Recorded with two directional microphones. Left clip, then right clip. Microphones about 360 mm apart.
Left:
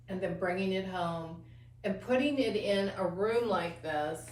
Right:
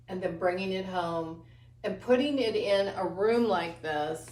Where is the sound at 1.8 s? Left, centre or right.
Centre.